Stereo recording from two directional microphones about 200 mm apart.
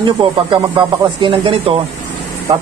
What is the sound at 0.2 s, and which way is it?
Speech, 25° right (ahead or behind).